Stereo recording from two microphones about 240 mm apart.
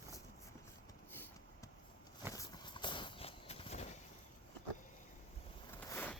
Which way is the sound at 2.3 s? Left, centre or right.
Centre.